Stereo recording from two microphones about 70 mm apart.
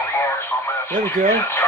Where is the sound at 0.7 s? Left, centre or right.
Left.